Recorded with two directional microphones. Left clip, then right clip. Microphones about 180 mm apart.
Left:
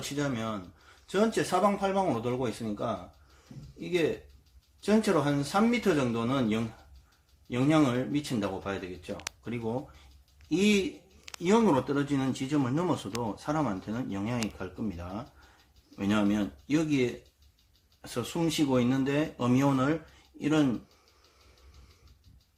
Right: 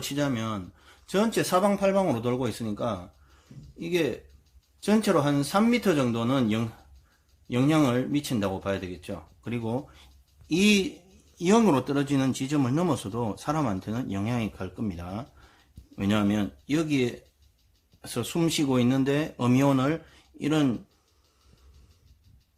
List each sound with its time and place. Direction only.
0.0 s speech: 70° right (ahead or behind)